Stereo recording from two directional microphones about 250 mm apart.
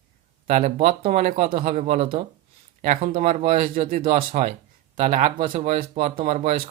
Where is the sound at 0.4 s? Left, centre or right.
Right.